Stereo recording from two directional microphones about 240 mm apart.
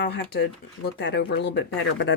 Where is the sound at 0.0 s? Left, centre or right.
Left.